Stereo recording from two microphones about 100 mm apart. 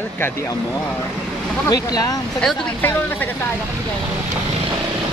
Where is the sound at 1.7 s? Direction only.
40° left (ahead or behind).